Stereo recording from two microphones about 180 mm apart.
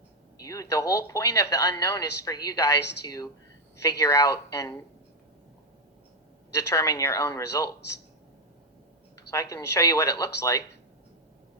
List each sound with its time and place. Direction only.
0.4 s speech: 20° left (ahead or behind)
6.5 s speech: 20° left (ahead or behind)
9.3 s speech: 15° left (ahead or behind)